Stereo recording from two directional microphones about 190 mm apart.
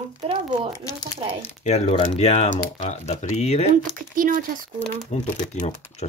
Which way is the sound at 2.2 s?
35° left (ahead or behind).